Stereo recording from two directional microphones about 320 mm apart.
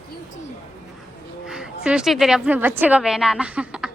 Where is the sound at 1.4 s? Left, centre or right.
Centre.